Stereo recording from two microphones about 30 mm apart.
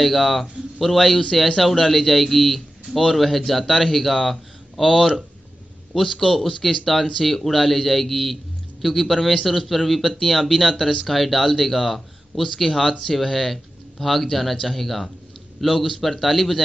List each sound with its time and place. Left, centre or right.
0.0 s a man's voice: centre